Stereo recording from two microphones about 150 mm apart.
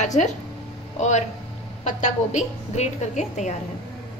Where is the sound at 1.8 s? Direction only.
50° left (ahead or behind).